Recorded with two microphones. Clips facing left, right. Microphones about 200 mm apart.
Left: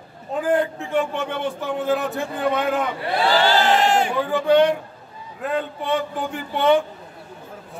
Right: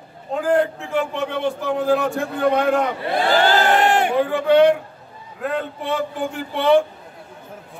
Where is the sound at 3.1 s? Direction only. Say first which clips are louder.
Right 1 dB; 50° right (ahead or behind).